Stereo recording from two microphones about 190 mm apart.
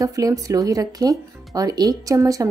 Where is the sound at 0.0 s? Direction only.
15° right (ahead or behind).